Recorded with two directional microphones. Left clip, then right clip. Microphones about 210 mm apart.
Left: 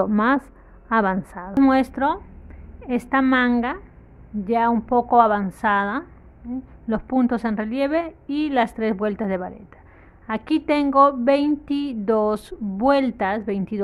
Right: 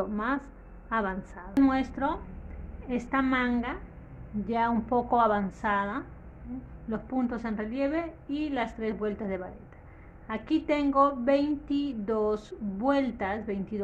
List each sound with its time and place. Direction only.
0.0 s a woman's voice: 40° left (ahead or behind)